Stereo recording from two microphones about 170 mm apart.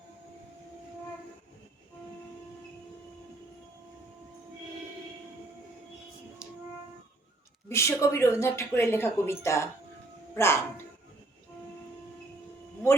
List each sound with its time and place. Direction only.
6.4 s music: 5° right (ahead or behind)
7.7 s a woman's voice: 15° left (ahead or behind)